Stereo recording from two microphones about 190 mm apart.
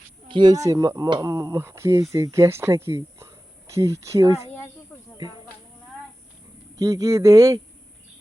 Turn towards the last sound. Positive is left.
turn(degrees=-20)  # may be behind; listen again after turning